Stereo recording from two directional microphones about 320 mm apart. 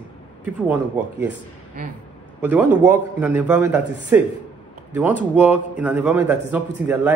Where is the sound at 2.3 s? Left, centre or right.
Centre.